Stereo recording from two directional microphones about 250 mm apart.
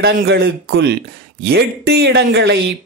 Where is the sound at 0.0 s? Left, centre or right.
Right.